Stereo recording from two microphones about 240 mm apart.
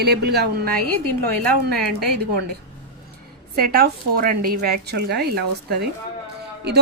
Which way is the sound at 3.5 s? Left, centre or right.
Right.